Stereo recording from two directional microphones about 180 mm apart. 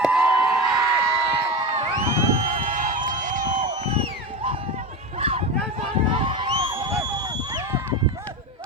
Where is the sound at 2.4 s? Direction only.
45° right (ahead or behind); by 7.9 s 15° right (ahead or behind).